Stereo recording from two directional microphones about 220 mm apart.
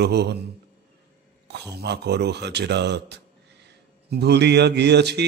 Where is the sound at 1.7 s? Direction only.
50° right (ahead or behind).